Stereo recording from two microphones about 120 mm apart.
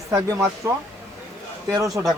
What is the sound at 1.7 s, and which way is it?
Speech, 25° right (ahead or behind).